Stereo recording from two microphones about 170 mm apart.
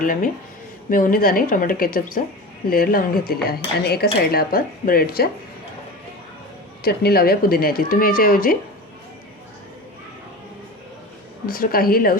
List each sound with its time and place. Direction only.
0.0 s speech: 55° left (ahead or behind)
6.8 s speech: 65° left (ahead or behind)
11.4 s speech: 60° left (ahead or behind)